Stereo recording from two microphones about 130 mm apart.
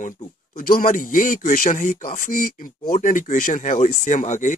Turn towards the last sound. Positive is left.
turn(degrees=70)  # may be behind; listen again after turning